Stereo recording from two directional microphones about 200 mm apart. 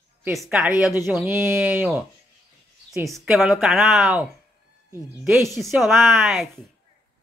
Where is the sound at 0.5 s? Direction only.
10° right (ahead or behind).